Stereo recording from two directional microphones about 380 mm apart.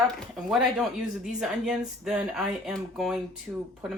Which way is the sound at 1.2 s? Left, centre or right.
Centre.